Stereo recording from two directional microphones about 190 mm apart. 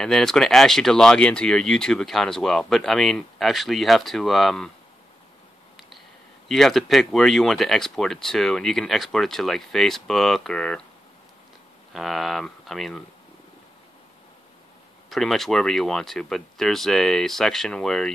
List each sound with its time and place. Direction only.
0.0 s speech: centre (ahead or behind)
6.5 s speech: centre (ahead or behind)
11.9 s speech: centre (ahead or behind)
15.0 s speech: centre (ahead or behind)